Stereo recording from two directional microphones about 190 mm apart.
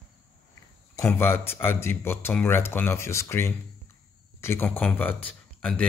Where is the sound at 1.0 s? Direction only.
10° left (ahead or behind).